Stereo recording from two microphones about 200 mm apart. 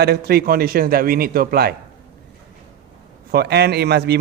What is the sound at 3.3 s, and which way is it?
Speech, 55° right (ahead or behind).